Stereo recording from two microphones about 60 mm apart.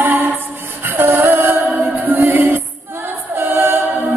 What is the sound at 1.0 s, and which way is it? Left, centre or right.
Music, right.